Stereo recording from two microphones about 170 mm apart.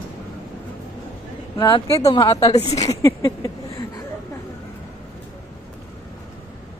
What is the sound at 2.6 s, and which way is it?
Speech, 35° left (ahead or behind).